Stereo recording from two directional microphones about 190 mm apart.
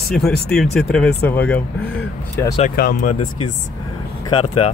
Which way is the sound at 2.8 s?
55° left (ahead or behind).